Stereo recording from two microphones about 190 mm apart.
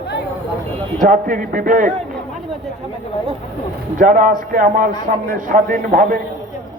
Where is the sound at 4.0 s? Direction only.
45° right (ahead or behind).